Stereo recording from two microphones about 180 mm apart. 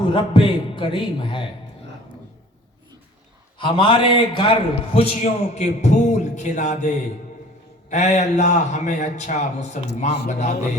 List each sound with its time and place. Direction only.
0.0 s a man's voice: 30° left (ahead or behind)
3.6 s a man's voice: 25° left (ahead or behind)